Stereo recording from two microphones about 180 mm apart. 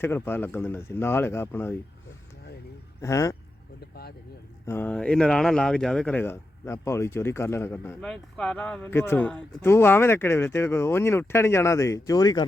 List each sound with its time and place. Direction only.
0.0 s speech: 10° left (ahead or behind)
3.0 s speech: 15° left (ahead or behind)
4.6 s speech: 10° left (ahead or behind)